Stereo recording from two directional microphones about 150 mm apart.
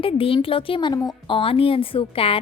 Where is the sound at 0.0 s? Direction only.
35° left (ahead or behind).